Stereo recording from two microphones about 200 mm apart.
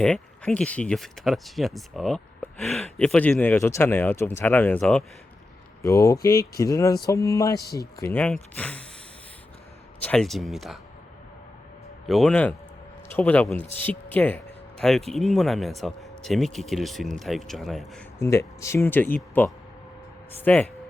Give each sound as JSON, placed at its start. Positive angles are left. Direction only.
{"t": 0.0, "sound": "speech", "side_deg": 5}
{"t": 10.0, "sound": "speech", "side_deg": 5}
{"t": 12.0, "sound": "speech", "side_deg": 0}
{"t": 18.2, "sound": "speech", "side_deg": 15}